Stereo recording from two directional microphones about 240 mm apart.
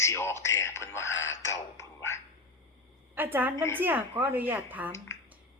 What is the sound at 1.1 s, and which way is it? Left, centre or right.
Speech, left.